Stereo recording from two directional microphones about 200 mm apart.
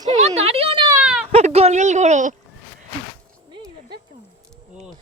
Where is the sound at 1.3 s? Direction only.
30° right (ahead or behind).